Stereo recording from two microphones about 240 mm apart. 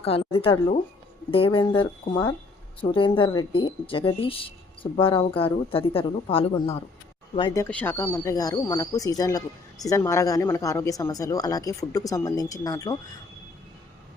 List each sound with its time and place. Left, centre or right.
0.0 s speech: left